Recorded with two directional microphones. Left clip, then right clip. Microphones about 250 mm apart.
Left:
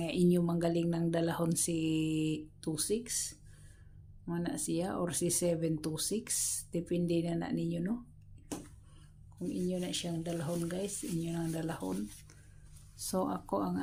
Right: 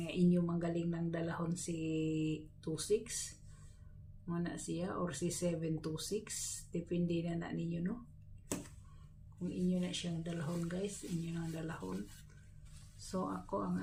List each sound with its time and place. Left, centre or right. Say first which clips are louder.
0.0 s speech: left 5 dB; left
4.3 s speech: left 5 dB; left
9.8 s speech: left 5 dB; left
13.1 s speech: left 6 dB; left